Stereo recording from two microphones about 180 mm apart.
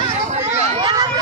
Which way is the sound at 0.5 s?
25° right (ahead or behind).